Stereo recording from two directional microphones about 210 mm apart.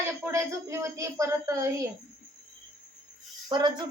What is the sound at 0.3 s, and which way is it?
A woman's voice, 15° right (ahead or behind).